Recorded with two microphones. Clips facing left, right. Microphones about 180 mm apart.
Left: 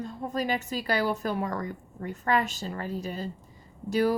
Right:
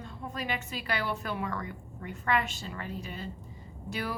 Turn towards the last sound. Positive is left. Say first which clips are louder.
# left 11 dB
turn(degrees=40)  # may be behind; listen again after turning